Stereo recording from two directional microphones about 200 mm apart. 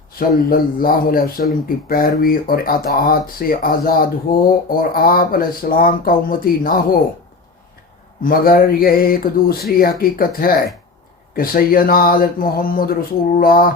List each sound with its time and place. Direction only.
0.2 s speech: 45° left (ahead or behind)
8.2 s speech: 45° left (ahead or behind)